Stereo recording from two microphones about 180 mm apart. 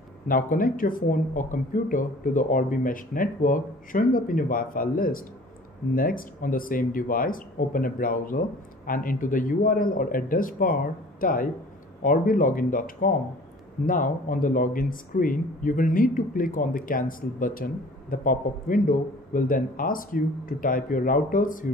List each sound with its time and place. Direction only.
0.3 s speech: 50° left (ahead or behind)